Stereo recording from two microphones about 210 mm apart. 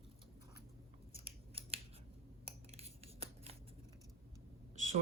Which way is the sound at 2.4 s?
30° right (ahead or behind).